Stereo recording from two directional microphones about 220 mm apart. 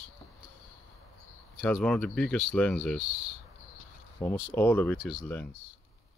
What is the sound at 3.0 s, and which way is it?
Speech, 30° right (ahead or behind).